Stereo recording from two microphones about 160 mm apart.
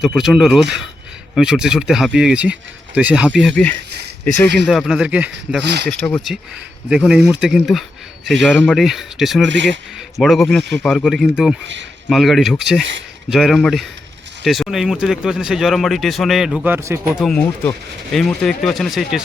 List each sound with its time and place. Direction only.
0.0 s speech: centre (ahead or behind)
3.5 s speech: 10° left (ahead or behind); by 5.6 s 5° right (ahead or behind)
5.6 s speech: 90° right
5.9 s speech: 10° left (ahead or behind)
6.9 s speech: centre (ahead or behind)
17.2 s speech: 5° left (ahead or behind)